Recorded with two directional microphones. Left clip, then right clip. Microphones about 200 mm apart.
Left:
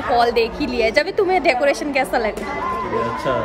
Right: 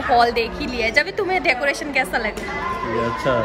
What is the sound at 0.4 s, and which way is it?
Speech, 20° left (ahead or behind).